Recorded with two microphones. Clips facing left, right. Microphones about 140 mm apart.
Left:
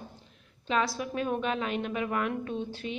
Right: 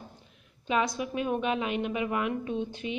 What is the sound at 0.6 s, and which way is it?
A woman's voice, 15° right (ahead or behind).